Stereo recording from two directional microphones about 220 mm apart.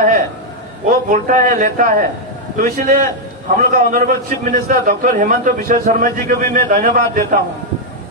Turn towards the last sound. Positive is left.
turn(degrees=-40)  # may be behind; listen again after turning